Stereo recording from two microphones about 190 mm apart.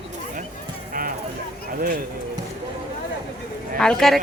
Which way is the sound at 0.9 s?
45° right (ahead or behind).